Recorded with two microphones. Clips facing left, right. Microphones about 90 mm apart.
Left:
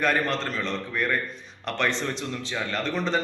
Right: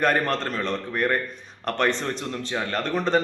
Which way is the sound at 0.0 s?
50° right (ahead or behind).